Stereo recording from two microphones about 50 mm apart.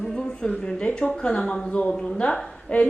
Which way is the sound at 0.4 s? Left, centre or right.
Left.